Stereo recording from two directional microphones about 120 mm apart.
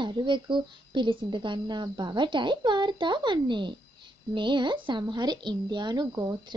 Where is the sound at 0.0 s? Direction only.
40° right (ahead or behind).